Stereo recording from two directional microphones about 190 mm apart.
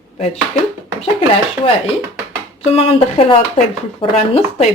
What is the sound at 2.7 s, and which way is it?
Speech, 30° left (ahead or behind).